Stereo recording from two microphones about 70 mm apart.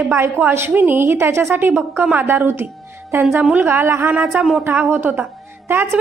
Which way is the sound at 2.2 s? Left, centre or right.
Right.